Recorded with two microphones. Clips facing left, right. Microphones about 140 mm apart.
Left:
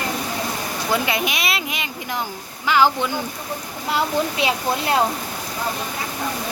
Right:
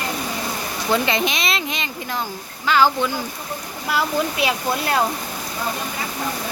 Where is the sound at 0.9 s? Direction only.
10° left (ahead or behind).